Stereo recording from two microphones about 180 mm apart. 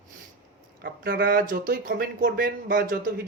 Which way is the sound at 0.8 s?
55° right (ahead or behind).